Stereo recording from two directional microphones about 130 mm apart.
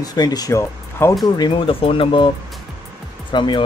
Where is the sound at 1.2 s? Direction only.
35° left (ahead or behind).